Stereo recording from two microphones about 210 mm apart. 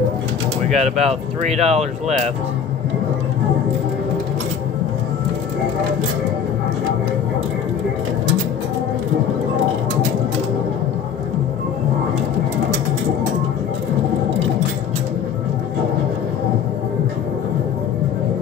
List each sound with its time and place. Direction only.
0.7 s speech: 30° right (ahead or behind)